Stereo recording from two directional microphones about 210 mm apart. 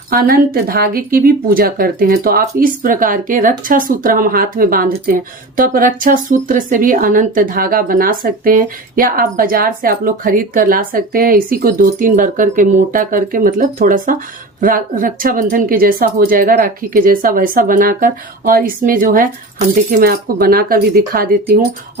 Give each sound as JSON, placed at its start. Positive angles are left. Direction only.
{"t": 0.1, "sound": "a woman's voice", "side_deg": -45}